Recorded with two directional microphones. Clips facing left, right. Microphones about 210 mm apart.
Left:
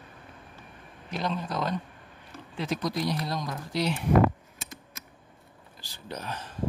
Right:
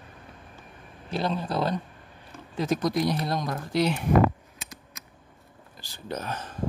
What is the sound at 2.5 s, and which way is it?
Speech, 45° right (ahead or behind).